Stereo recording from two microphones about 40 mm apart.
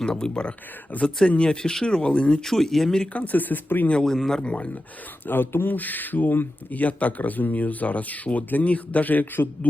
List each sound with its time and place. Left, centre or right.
0.0 s speech: centre
0.9 s speech: left
1.4 s speech: left
2.4 s speech: centre
3.1 s speech: left
4.0 s speech: centre
4.5 s speech: left
5.2 s speech: left
5.7 s speech: left